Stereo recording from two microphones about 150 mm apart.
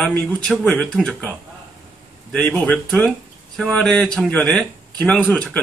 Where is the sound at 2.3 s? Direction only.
10° left (ahead or behind).